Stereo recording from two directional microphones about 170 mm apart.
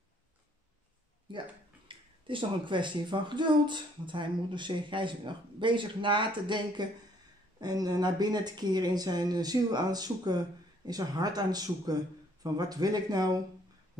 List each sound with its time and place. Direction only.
1.9 s speech: 30° right (ahead or behind)